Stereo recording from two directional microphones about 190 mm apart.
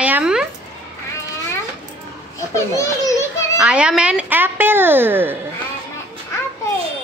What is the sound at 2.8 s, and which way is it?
Speech, 15° left (ahead or behind).